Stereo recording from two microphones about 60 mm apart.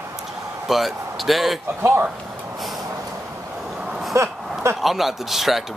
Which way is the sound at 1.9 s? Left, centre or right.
Right.